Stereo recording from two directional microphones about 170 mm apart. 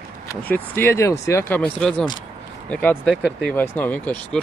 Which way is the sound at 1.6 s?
5° left (ahead or behind).